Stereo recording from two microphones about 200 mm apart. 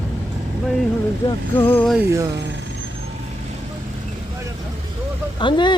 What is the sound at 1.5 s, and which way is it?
Speech, 10° left (ahead or behind).